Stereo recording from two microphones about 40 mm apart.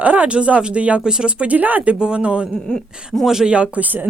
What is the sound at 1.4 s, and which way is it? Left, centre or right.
Speech, right.